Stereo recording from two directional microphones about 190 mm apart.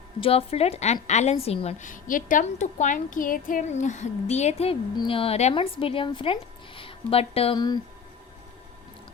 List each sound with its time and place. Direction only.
0.2 s a woman's voice: 30° left (ahead or behind)